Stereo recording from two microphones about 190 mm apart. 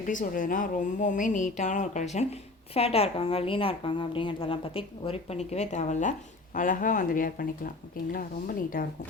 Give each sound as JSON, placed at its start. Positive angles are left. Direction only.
{"t": 0.1, "sound": "a woman's voice", "side_deg": 45}